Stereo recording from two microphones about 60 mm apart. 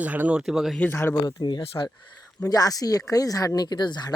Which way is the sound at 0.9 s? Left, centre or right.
Left.